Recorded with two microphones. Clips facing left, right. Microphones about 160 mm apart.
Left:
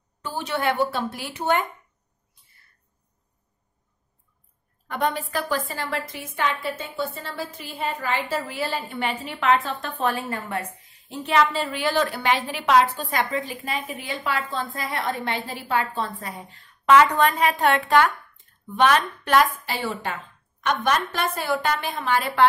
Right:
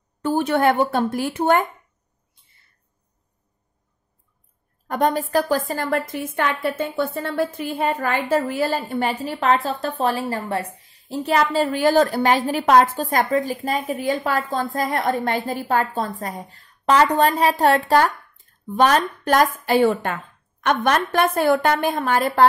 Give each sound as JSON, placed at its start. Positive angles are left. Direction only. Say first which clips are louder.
{"t": 0.2, "sound": "a woman's voice", "louder": "right 8 dB", "side_deg": -50}
{"t": 2.3, "sound": "a sound", "louder": "left 1 dB", "side_deg": -25}
{"t": 4.8, "sound": "a woman's voice", "louder": "right 5 dB", "side_deg": -45}